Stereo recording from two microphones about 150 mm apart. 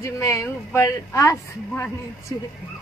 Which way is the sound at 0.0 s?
20° left (ahead or behind).